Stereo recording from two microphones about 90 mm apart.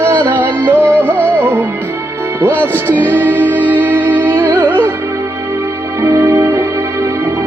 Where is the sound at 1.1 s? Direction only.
15° left (ahead or behind).